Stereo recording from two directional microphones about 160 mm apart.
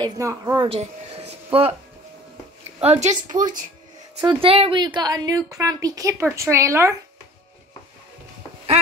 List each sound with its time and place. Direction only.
0.2 s a woman's voice: 20° right (ahead or behind)
0.7 s a sound: 40° right (ahead or behind)
2.8 s a woman's voice: 45° right (ahead or behind)
4.2 s a woman's voice: 30° right (ahead or behind)